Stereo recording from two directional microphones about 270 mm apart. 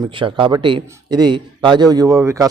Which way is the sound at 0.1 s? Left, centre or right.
Centre.